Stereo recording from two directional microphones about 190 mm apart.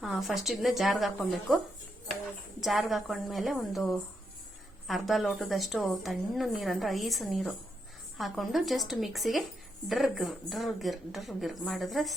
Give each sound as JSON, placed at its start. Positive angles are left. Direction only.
{"t": 0.0, "sound": "a woman's voice", "side_deg": 0}